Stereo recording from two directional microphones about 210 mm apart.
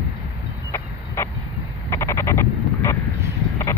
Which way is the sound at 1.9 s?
15° left (ahead or behind).